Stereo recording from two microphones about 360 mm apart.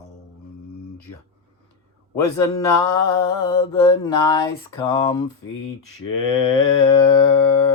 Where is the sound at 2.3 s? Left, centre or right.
Centre.